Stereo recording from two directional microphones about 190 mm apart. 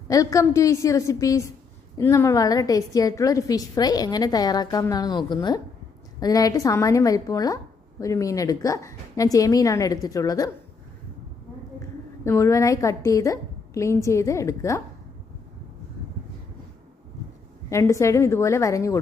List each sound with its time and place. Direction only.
0.1 s a woman's voice: 15° left (ahead or behind)
12.2 s a woman's voice: 15° left (ahead or behind)
17.7 s a woman's voice: 15° left (ahead or behind)